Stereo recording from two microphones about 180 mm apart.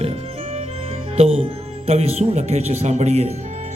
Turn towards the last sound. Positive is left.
turn(degrees=-35)  # may be behind; listen again after turning